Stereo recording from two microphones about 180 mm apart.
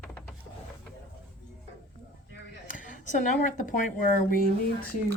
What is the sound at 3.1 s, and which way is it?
Speech, 45° left (ahead or behind).